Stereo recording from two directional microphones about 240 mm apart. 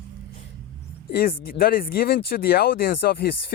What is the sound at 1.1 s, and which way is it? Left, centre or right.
Speech, left.